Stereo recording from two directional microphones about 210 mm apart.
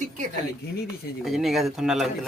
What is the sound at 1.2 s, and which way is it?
Speech, centre (ahead or behind).